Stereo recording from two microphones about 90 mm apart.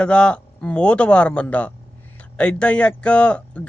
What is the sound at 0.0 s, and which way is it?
Speech, 10° left (ahead or behind).